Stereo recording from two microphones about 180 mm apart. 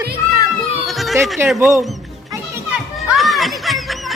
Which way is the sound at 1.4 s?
15° right (ahead or behind).